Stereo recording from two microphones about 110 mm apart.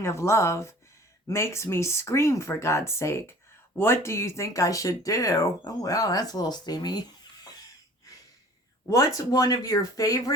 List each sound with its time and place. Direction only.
0.0 s speech: 25° left (ahead or behind)
8.9 s speech: 30° left (ahead or behind)